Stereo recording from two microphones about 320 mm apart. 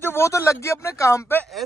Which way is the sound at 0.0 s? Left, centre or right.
Centre.